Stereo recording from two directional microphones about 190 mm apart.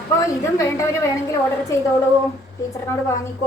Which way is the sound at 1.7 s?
15° left (ahead or behind).